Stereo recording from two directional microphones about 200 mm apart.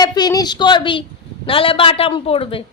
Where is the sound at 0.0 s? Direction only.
20° left (ahead or behind).